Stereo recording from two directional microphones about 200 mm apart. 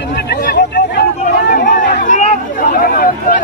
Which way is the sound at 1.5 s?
45° left (ahead or behind).